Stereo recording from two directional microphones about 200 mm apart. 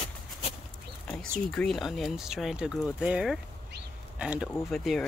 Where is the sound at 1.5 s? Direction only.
Centre (ahead or behind).